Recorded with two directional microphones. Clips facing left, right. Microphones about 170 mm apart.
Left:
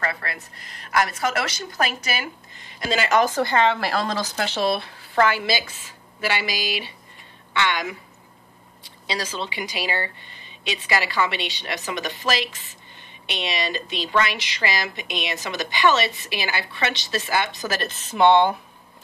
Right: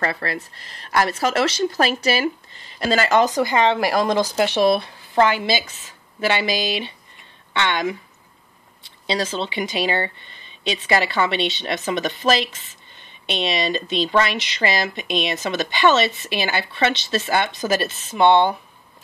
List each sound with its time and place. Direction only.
0.0 s speech: 30° right (ahead or behind)
3.2 s speech: 15° right (ahead or behind)
17.8 s speech: centre (ahead or behind)